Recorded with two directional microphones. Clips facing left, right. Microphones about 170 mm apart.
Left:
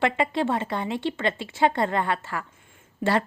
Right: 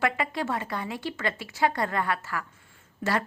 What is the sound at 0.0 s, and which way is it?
A woman's voice, 25° left (ahead or behind).